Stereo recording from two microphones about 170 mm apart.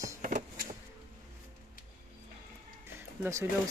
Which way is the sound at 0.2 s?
55° right (ahead or behind).